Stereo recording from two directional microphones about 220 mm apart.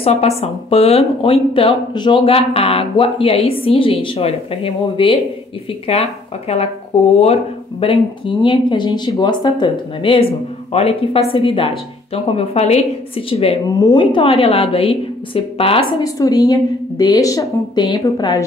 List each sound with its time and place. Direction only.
0.0 s a woman's voice: 30° left (ahead or behind)